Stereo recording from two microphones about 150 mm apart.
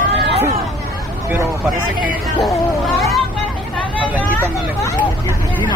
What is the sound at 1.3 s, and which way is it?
Speech, 15° right (ahead or behind).